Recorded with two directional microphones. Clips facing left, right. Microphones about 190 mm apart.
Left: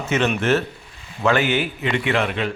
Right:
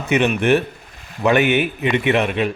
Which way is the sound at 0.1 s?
15° right (ahead or behind).